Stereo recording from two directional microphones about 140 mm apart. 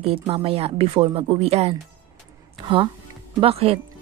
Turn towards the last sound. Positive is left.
turn(degrees=-45)  # may be behind; listen again after turning